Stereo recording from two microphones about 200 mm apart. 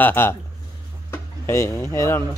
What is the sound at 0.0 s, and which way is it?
Speech, 10° left (ahead or behind).